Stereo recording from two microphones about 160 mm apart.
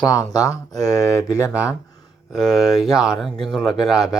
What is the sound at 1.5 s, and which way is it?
Speech, 10° right (ahead or behind).